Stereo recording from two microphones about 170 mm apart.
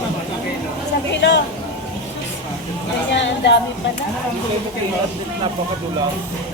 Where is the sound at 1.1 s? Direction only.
90° left.